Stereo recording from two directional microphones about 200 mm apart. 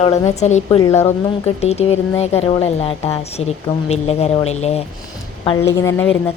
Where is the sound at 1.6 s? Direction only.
30° left (ahead or behind).